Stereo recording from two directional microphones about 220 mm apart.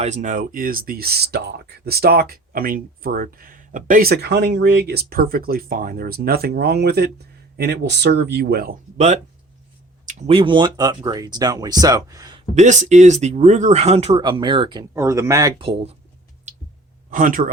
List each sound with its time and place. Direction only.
0.0 s speech: 35° right (ahead or behind)
10.1 s speech: 30° right (ahead or behind)
12.5 s speech: 35° right (ahead or behind)
17.1 s speech: 40° right (ahead or behind)